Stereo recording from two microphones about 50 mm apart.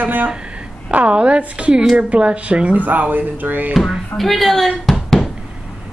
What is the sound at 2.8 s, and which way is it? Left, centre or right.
Speech, right.